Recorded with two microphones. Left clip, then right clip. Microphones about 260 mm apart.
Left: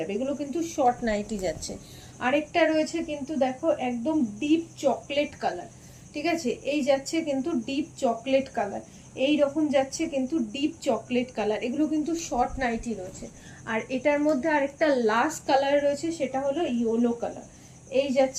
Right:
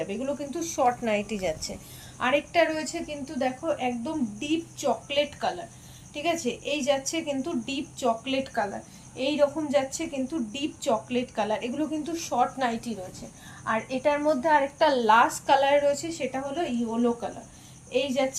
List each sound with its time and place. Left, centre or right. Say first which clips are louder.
0.0 s a woman's voice: left 1 dB; centre
1.0 s a woman's voice: right 1 dB; right
2.1 s a woman's voice: right 1 dB; centre
17.9 s a woman's voice: left 3 dB; centre